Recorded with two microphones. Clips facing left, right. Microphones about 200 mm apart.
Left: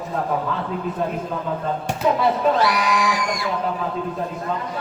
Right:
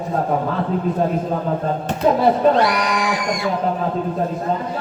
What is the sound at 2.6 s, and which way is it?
Speech, 55° right (ahead or behind).